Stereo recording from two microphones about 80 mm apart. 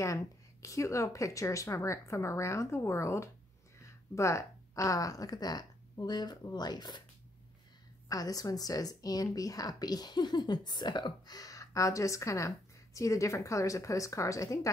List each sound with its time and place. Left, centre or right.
0.0 s speech: left
8.1 s a woman's voice: left